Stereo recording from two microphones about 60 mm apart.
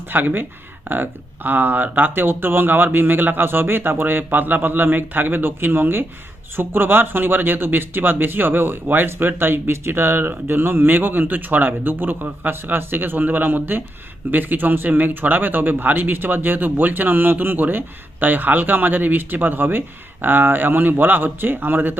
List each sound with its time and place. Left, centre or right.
0.1 s speech: right